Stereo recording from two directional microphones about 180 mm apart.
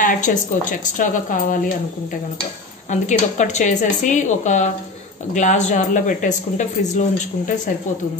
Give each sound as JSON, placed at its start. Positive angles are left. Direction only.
{"t": 0.0, "sound": "speech", "side_deg": 45}
{"t": 2.9, "sound": "speech", "side_deg": 40}